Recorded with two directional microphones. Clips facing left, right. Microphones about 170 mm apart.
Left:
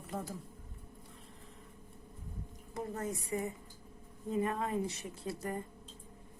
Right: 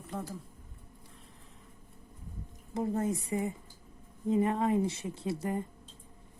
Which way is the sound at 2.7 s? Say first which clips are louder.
Right 7 dB; 25° right (ahead or behind).